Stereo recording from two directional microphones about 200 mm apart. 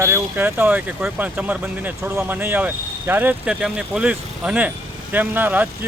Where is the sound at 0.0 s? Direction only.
10° right (ahead or behind).